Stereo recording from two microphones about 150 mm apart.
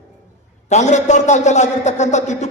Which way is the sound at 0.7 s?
50° left (ahead or behind).